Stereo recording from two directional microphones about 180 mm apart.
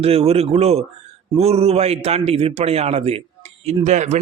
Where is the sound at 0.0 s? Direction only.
35° right (ahead or behind).